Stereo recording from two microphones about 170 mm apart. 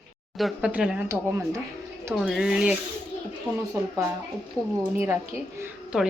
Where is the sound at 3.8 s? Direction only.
20° right (ahead or behind).